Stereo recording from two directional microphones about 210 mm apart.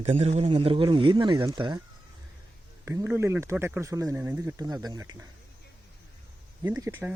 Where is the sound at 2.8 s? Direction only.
10° right (ahead or behind).